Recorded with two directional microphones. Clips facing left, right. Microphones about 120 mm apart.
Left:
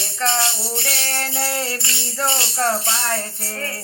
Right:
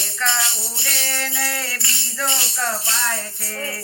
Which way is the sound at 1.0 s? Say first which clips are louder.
Left 2 dB; 40° left (ahead or behind).